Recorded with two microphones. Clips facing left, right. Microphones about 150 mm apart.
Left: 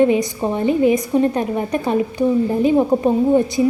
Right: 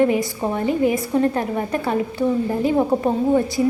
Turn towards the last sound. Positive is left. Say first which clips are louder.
# left 3 dB
turn(degrees=20)  # may be behind; listen again after turning